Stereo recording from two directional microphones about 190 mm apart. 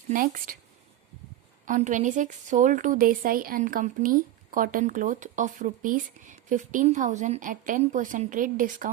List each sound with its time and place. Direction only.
0.1 s a woman's voice: 50° right (ahead or behind)
1.6 s a woman's voice: 40° right (ahead or behind)